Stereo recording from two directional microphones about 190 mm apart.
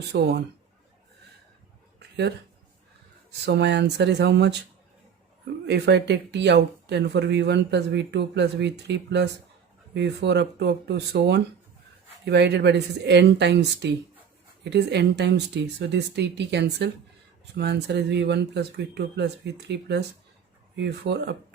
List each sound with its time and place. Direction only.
0.1 s speech: 60° right (ahead or behind)
2.0 s a sound: 65° right (ahead or behind)
3.4 s speech: 65° right (ahead or behind)
5.6 s speech: 60° right (ahead or behind)